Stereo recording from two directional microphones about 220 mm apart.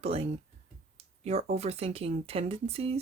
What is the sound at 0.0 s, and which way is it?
Speech, 25° right (ahead or behind).